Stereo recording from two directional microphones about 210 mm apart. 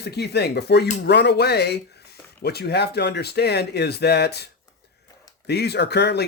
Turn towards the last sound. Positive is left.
turn(degrees=50)  # may be behind; listen again after turning